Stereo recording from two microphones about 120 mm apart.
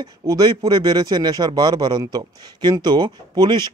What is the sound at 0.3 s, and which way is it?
A man's voice, 35° right (ahead or behind).